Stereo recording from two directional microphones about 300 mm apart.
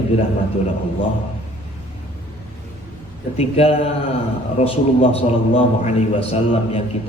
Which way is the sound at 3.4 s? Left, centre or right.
Centre.